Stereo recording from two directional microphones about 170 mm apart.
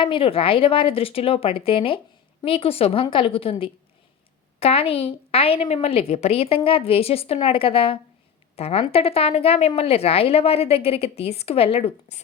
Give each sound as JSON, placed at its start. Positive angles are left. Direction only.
{"t": 0.0, "sound": "a woman's voice", "side_deg": 30}